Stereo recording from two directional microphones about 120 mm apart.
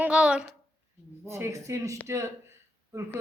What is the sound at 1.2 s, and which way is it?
A man's voice, 25° right (ahead or behind).